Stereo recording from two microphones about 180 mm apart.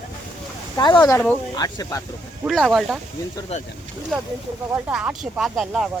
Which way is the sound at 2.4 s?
Centre (ahead or behind).